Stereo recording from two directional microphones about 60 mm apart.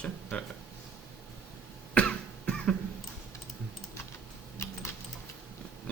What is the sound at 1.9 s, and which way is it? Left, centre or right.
Cough, centre.